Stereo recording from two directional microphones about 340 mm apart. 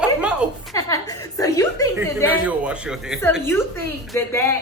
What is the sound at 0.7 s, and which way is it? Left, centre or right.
Chuckle, centre.